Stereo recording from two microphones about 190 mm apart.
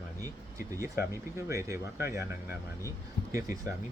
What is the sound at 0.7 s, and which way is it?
Speech, 15° right (ahead or behind).